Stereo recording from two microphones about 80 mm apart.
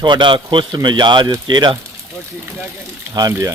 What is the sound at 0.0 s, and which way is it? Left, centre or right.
Speech, right.